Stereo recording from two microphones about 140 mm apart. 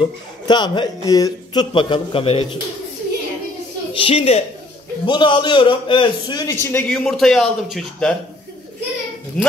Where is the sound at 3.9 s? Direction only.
40° left (ahead or behind).